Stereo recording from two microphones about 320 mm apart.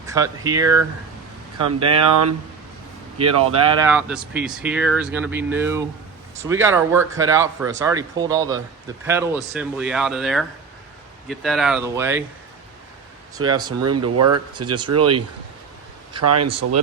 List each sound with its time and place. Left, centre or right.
0.1 s speech: centre
3.2 s speech: centre
3.8 s speech: centre
13.3 s speech: centre
14.6 s speech: right
16.2 s speech: right